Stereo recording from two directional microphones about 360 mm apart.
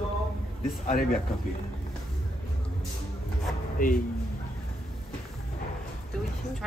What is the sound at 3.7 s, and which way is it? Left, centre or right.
Speech, left.